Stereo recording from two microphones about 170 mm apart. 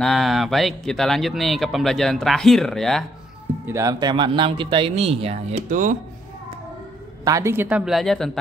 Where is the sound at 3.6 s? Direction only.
20° right (ahead or behind); by 5.8 s 35° right (ahead or behind).